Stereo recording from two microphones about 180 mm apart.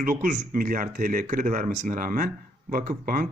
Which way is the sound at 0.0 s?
50° right (ahead or behind).